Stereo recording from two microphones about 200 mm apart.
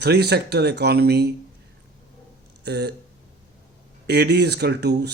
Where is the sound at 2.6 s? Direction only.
55° right (ahead or behind).